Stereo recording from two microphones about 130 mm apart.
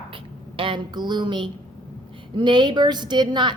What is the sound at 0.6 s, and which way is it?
A woman's voice, 40° right (ahead or behind).